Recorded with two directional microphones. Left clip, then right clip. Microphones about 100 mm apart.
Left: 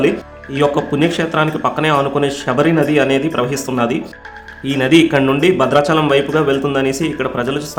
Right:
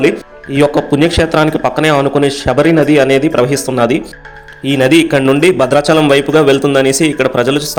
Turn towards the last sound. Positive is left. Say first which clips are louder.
# right 7 dB
turn(degrees=-45)  # may be behind; listen again after turning